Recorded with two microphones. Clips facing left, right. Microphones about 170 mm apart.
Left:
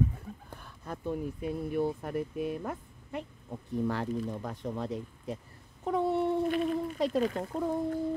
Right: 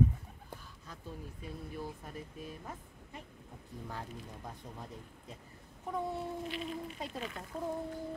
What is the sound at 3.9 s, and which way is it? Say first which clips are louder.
Speech: left 10 dB; 80° left.